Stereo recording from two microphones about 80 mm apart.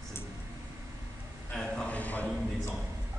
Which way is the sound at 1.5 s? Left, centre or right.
Centre.